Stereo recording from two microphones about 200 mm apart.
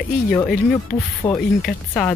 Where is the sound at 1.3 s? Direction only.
5° left (ahead or behind).